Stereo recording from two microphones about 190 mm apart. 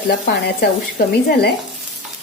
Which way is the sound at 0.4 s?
55° left (ahead or behind).